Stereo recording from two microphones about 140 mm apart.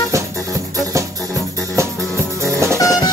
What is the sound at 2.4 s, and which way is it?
Music, 20° right (ahead or behind).